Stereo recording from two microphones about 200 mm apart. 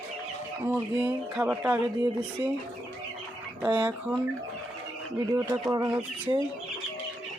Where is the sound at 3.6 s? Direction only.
10° right (ahead or behind).